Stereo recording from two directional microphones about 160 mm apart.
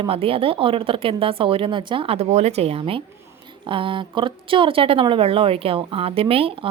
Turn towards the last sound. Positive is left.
turn(degrees=-35)  # may be behind; listen again after turning